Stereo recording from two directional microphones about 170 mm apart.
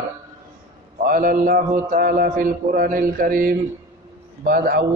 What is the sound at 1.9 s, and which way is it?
Mantra, 55° right (ahead or behind).